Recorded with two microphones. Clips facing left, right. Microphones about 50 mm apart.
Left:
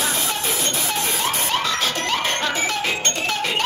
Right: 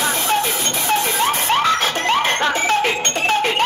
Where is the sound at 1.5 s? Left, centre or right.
Right.